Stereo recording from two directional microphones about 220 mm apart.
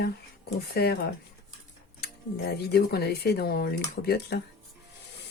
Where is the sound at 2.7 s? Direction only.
45° left (ahead or behind).